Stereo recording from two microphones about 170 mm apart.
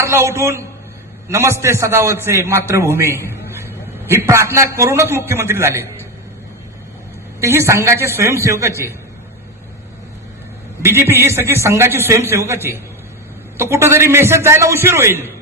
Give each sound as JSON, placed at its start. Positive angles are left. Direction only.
{"t": 0.0, "sound": "a man's voice", "side_deg": -15}
{"t": 7.4, "sound": "a man's voice", "side_deg": -15}
{"t": 10.8, "sound": "a man's voice", "side_deg": -15}
{"t": 13.6, "sound": "a man's voice", "side_deg": -15}